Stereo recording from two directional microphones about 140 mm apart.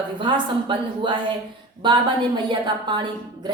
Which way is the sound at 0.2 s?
35° right (ahead or behind).